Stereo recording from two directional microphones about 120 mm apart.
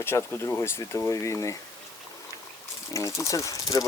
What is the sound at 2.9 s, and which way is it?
Speech, 25° left (ahead or behind).